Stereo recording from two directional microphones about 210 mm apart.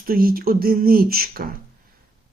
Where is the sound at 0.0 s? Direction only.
45° right (ahead or behind).